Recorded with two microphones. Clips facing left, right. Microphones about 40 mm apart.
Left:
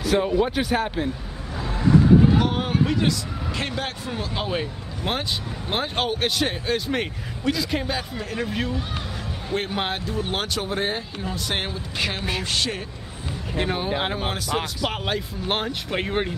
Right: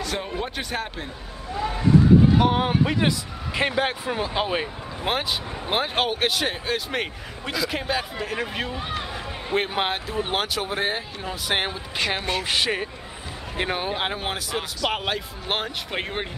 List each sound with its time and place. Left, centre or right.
0.0 s a sound: centre
0.4 s speech: centre
2.3 s a man's voice: centre